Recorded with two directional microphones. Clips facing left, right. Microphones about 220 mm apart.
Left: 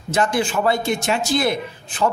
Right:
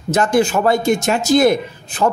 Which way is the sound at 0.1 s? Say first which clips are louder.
Right 5 dB; 45° right (ahead or behind).